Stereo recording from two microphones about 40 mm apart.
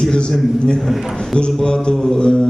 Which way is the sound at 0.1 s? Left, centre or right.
Left.